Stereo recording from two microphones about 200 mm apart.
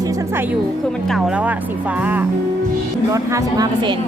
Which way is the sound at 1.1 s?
5° right (ahead or behind).